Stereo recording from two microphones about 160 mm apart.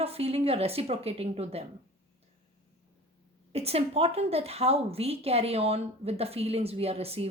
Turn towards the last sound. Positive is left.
turn(degrees=-40)  # may be behind; listen again after turning